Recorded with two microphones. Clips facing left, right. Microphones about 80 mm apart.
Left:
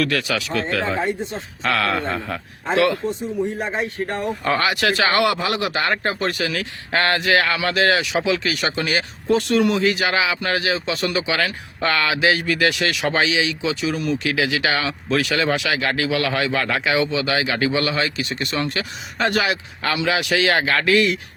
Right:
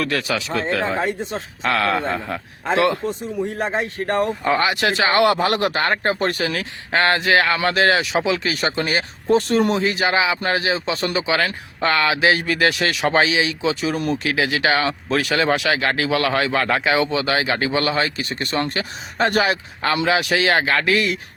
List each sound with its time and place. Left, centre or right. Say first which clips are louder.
0.0 s a man's voice: left 1 dB; right
3.6 s speech: right 1 dB; right
4.4 s speech: left 3 dB; centre